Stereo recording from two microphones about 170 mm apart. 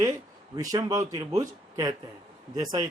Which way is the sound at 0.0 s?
20° right (ahead or behind).